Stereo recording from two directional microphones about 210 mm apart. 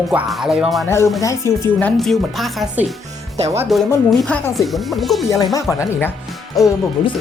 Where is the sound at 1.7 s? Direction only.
5° left (ahead or behind).